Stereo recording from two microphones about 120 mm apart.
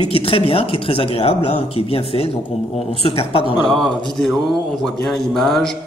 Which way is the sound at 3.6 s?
5° left (ahead or behind).